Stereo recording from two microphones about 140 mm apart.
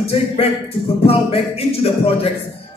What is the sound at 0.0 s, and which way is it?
A man's voice, 45° left (ahead or behind).